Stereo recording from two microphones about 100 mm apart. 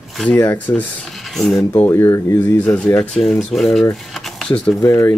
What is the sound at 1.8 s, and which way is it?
Speech, 25° left (ahead or behind).